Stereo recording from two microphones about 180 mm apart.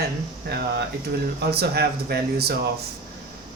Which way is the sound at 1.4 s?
60° right (ahead or behind).